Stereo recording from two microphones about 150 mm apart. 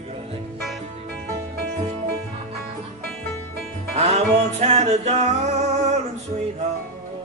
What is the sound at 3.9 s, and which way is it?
Music, 50° right (ahead or behind).